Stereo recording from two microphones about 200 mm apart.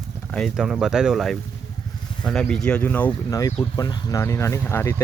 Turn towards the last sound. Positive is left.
turn(degrees=10)  # may be behind; listen again after turning